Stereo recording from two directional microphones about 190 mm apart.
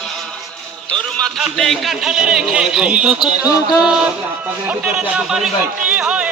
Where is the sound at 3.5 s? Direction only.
20° left (ahead or behind).